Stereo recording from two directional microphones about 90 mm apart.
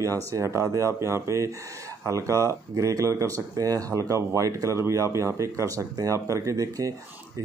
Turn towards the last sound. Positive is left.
turn(degrees=-40)  # may be behind; listen again after turning